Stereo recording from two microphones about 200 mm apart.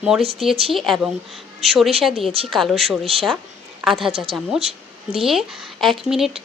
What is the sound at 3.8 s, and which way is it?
Speech, centre (ahead or behind).